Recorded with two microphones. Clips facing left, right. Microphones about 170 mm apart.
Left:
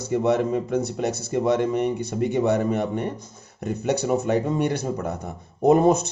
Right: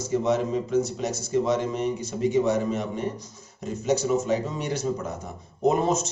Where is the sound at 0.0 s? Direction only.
60° left (ahead or behind).